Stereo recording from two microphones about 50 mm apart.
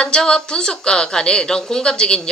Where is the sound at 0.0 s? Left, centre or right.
Centre.